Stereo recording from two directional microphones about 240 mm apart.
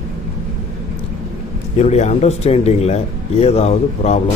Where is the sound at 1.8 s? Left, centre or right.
Left.